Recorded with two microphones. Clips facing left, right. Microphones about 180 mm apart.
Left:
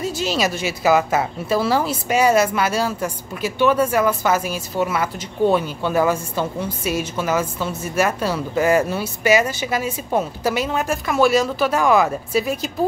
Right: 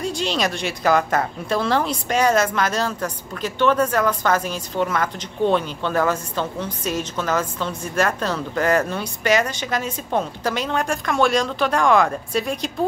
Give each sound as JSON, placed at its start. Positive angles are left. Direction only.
{"t": 0.0, "sound": "a woman's voice", "side_deg": 5}